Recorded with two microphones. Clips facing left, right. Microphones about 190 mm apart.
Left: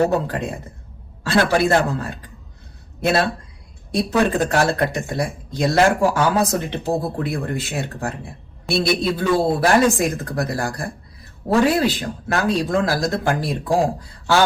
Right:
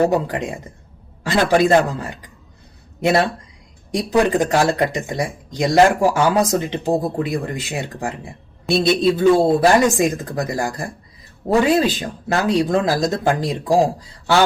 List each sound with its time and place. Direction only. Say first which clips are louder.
0.1 s speech: right 1 dB; 15° right (ahead or behind)